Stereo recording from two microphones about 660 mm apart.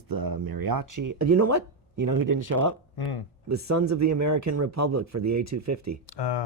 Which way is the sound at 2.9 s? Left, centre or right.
Left.